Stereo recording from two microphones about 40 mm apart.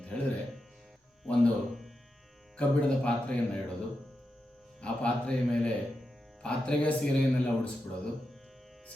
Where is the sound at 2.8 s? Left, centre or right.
Left.